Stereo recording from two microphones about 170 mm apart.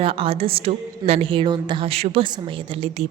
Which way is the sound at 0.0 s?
35° right (ahead or behind).